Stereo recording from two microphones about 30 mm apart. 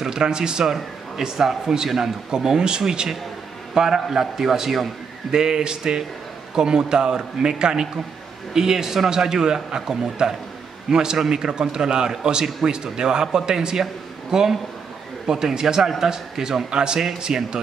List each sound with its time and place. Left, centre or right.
0.0 s a man's voice: right
1.1 s a man's voice: centre
5.3 s a man's voice: right